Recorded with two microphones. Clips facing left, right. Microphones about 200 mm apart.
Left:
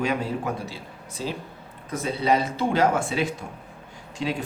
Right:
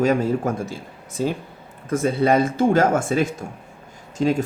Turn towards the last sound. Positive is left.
turn(degrees=-45)  # may be behind; listen again after turning